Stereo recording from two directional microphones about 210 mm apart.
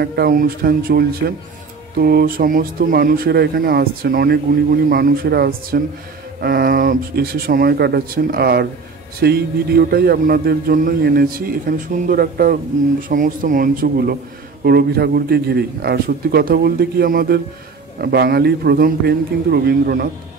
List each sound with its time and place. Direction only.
0.0 s a man's voice: 50° right (ahead or behind)